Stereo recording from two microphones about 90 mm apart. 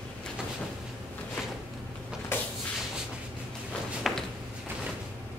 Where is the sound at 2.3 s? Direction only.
25° left (ahead or behind).